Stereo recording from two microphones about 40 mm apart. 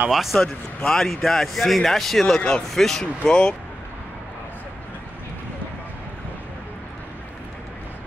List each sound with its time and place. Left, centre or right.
0.1 s speech: centre
0.8 s speech: centre
3.3 s speech: left